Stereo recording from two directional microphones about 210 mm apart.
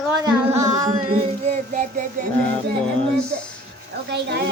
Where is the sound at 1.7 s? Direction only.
40° right (ahead or behind).